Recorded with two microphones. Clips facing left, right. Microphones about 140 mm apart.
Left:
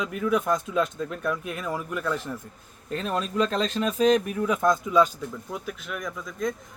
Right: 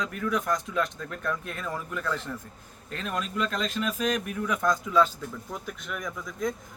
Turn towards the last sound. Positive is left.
turn(degrees=0)  # may be behind; listen again after turning